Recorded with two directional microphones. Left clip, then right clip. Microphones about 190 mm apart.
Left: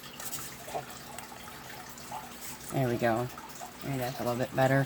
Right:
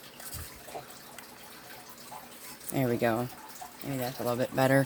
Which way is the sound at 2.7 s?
50° right (ahead or behind).